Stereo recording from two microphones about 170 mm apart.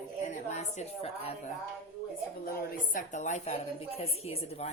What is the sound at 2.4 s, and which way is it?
Speech, 55° left (ahead or behind).